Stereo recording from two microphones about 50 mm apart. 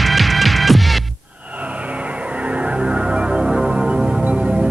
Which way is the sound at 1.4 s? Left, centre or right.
Right.